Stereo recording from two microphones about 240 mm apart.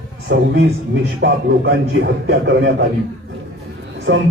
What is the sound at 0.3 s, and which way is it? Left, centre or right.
Speech, right.